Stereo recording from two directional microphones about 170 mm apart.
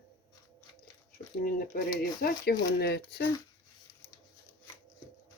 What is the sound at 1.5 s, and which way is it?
Speech, 55° left (ahead or behind).